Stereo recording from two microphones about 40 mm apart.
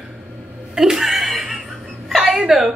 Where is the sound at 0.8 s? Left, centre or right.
Centre.